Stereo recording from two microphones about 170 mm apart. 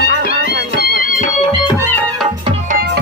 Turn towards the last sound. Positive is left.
turn(degrees=-65)  # may be behind; listen again after turning